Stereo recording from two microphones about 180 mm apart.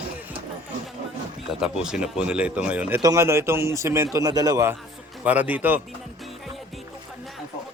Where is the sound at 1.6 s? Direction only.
5° right (ahead or behind).